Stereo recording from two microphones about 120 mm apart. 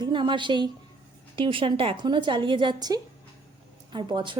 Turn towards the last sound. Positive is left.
turn(degrees=-40)  # may be behind; listen again after turning